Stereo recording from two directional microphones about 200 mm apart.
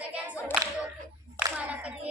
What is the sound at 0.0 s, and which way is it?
A capella, 10° right (ahead or behind).